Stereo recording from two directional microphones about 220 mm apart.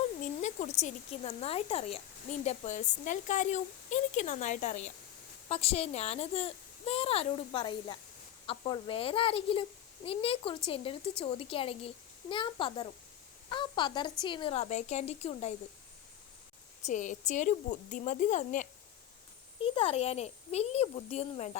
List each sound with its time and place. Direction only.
0.4 s a child's voice: 30° left (ahead or behind)
16.8 s a woman's voice: 35° left (ahead or behind)